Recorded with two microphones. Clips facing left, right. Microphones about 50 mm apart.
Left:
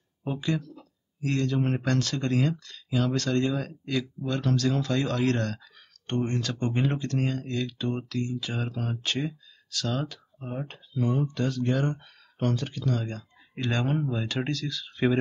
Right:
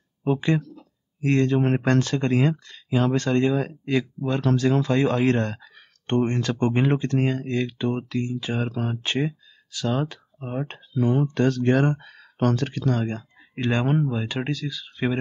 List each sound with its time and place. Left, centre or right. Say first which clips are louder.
0.4 s speech: right 6 dB; right
13.1 s a sound: right 6 dB; right
13.7 s speech: right 4 dB; right